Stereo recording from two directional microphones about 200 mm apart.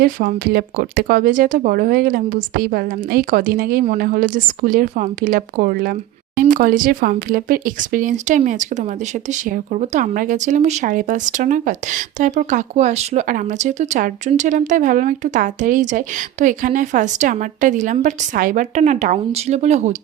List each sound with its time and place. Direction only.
0.0 s speech: 45° right (ahead or behind)